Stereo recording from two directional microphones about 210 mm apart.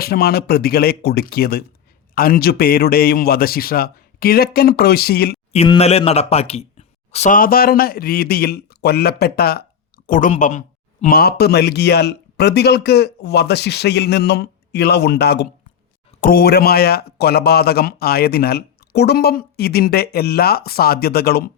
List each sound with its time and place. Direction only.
0.0 s speech: 45° left (ahead or behind)
5.5 s speech: 30° left (ahead or behind); by 21.5 s 50° left (ahead or behind)